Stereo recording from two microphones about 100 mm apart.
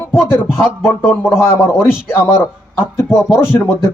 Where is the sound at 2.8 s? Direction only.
25° left (ahead or behind).